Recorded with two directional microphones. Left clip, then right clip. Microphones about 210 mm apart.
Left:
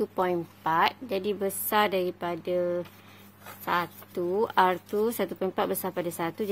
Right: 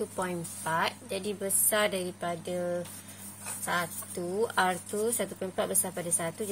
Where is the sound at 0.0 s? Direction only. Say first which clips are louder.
Left 6 dB; 45° left (ahead or behind).